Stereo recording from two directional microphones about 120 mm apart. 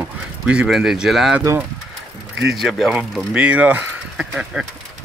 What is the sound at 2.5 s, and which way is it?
Speech, centre (ahead or behind).